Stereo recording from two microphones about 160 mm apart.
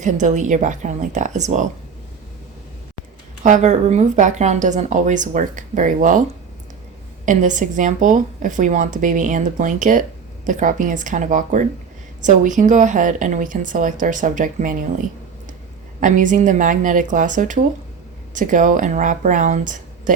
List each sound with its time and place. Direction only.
0.0 s a woman's voice: 50° right (ahead or behind)
3.4 s a woman's voice: 50° right (ahead or behind)
7.3 s a woman's voice: 55° right (ahead or behind)
16.0 s a woman's voice: 55° right (ahead or behind)